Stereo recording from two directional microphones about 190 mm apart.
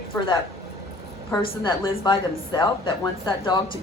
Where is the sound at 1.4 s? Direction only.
25° left (ahead or behind).